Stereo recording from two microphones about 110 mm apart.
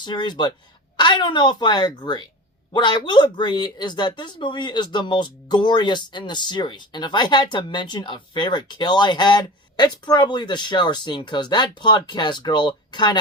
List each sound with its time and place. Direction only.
0.0 s speech: 45° left (ahead or behind)